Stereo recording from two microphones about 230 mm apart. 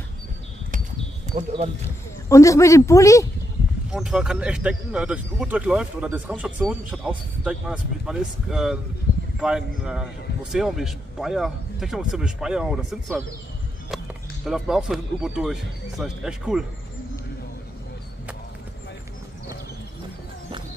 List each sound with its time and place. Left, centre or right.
1.2 s speech: right
2.2 s speech: centre
3.9 s speech: centre